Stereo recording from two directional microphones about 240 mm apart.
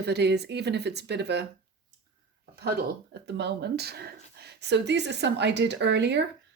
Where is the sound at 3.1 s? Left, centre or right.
Right.